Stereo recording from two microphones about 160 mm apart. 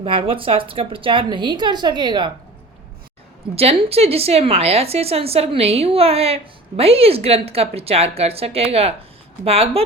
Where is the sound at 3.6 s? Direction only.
40° right (ahead or behind).